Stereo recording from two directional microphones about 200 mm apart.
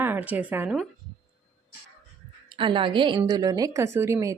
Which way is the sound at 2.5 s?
25° right (ahead or behind).